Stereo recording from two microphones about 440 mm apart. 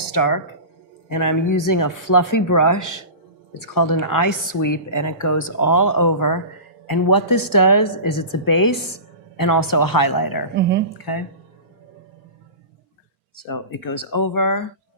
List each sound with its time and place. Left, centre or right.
0.1 s speech: left
13.8 s speech: left